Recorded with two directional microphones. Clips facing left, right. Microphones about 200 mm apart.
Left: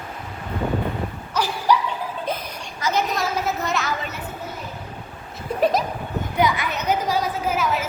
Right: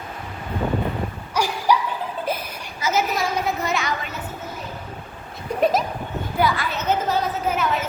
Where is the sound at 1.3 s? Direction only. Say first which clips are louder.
Even; 10° right (ahead or behind).